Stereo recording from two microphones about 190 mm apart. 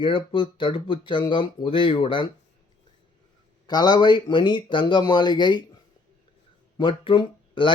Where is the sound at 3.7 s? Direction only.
20° left (ahead or behind).